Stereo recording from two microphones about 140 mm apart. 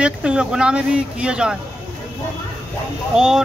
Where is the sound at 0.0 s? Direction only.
5° right (ahead or behind).